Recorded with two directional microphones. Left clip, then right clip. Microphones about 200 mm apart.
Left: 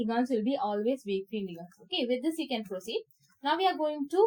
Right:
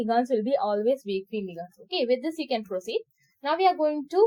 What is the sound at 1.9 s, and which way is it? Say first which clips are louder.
A woman's voice: right 5 dB; 15° right (ahead or behind).